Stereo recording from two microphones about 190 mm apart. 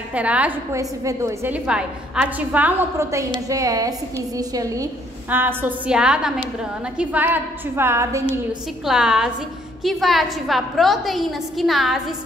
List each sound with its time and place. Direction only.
0.1 s a woman's voice: 5° right (ahead or behind)
8.8 s a woman's voice: centre (ahead or behind)